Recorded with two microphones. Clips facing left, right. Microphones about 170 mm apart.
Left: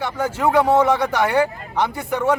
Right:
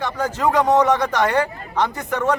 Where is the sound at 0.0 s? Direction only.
10° left (ahead or behind).